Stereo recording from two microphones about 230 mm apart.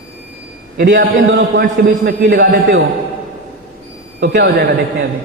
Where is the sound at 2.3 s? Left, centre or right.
Right.